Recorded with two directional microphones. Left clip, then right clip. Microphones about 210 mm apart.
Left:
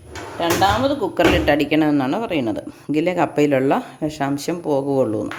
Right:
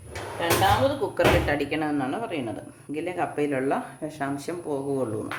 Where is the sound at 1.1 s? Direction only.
45° left (ahead or behind).